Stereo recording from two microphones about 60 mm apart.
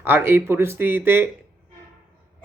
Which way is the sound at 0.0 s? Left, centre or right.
Right.